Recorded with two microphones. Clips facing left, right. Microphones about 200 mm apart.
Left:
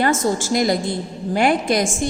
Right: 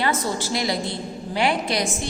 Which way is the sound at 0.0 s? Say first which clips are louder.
Left 5 dB; 45° left (ahead or behind).